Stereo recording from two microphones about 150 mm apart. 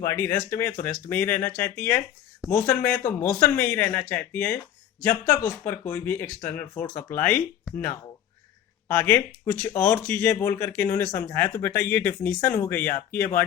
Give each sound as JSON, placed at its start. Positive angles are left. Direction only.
{"t": 0.0, "sound": "speech", "side_deg": 20}
{"t": 3.0, "sound": "speech", "side_deg": 20}
{"t": 6.8, "sound": "speech", "side_deg": 25}
{"t": 8.9, "sound": "speech", "side_deg": 10}
{"t": 9.4, "sound": "speech", "side_deg": 25}